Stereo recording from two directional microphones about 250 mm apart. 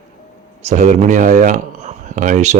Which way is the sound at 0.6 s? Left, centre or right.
Right.